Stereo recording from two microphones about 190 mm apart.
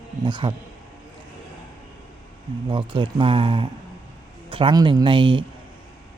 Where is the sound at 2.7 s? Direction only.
25° right (ahead or behind).